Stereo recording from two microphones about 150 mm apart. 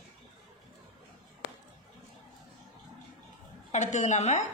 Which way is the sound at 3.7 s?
50° left (ahead or behind).